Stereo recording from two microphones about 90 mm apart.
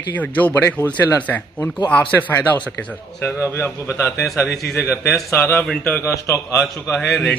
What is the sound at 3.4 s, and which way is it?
A man's voice, 30° left (ahead or behind).